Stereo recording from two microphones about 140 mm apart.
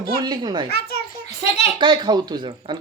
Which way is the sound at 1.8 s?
35° right (ahead or behind).